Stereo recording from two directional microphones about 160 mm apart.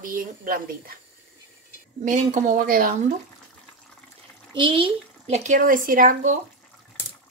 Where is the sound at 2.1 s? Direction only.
55° right (ahead or behind).